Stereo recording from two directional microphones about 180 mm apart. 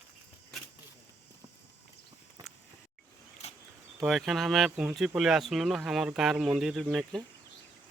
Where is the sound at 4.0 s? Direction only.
Centre (ahead or behind).